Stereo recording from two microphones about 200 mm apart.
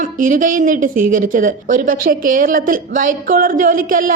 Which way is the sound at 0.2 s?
40° right (ahead or behind).